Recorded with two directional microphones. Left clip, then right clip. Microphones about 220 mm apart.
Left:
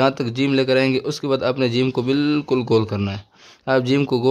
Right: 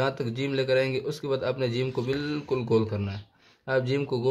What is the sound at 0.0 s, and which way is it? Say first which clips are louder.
A man's voice: left 9 dB; 40° left (ahead or behind).